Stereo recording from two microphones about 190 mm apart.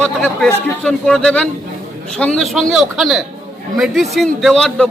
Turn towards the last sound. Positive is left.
turn(degrees=5)  # may be behind; listen again after turning